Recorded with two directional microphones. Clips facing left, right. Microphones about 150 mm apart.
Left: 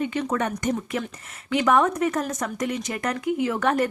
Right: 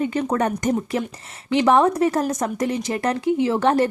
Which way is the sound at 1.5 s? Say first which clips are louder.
Right 4 dB; 30° right (ahead or behind).